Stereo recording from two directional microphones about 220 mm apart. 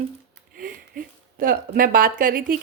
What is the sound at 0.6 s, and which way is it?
A woman's voice, 40° right (ahead or behind).